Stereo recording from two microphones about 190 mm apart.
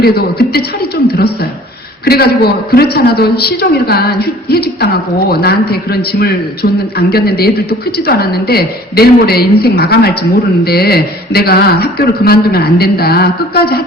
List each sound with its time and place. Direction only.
0.0 s a man's voice: 55° left (ahead or behind)